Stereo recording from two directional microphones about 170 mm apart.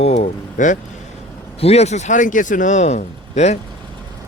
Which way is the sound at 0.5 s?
50° left (ahead or behind).